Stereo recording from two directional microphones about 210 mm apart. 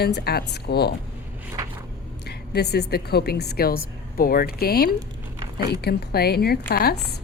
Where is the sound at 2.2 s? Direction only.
50° left (ahead or behind).